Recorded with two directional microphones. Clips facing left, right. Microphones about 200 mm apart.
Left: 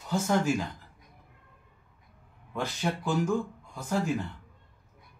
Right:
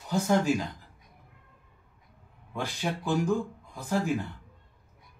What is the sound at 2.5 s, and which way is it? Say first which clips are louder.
Speech: left 1 dB; 15° right (ahead or behind).